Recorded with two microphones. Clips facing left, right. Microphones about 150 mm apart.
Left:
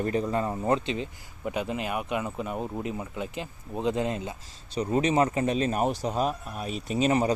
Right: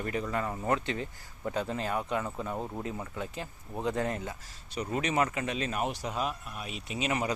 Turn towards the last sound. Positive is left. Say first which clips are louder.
# left 8 dB
turn(degrees=35)  # may be behind; listen again after turning